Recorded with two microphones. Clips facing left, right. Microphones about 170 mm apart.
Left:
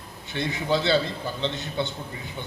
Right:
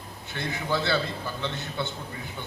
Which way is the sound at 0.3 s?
20° left (ahead or behind).